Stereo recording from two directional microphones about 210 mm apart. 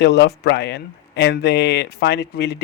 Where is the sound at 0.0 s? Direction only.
55° left (ahead or behind).